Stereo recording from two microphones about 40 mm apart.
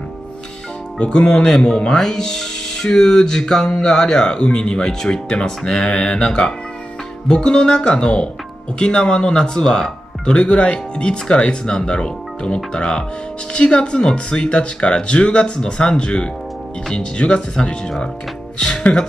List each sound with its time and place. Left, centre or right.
0.9 s speech: left
18.6 s music: left